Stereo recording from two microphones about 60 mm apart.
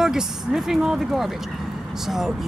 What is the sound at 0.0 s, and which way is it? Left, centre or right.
Speech, centre.